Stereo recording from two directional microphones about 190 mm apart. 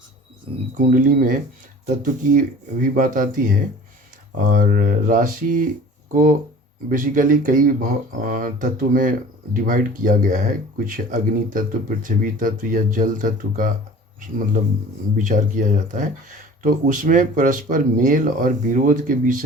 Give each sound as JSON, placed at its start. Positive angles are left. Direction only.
{"t": 0.8, "sound": "speech", "side_deg": -45}
{"t": 6.9, "sound": "speech", "side_deg": -45}